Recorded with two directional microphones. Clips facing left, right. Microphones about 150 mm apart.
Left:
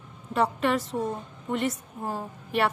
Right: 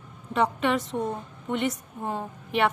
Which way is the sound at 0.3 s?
Centre (ahead or behind).